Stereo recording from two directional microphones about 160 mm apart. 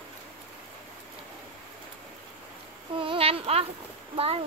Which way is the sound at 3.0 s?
35° right (ahead or behind).